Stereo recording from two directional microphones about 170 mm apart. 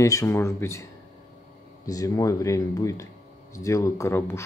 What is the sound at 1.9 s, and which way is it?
Speech, 20° left (ahead or behind).